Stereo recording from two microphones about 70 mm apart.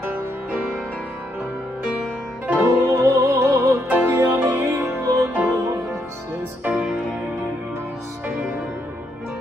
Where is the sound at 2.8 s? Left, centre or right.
Right.